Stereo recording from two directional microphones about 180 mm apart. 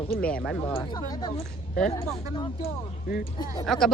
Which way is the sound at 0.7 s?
25° left (ahead or behind).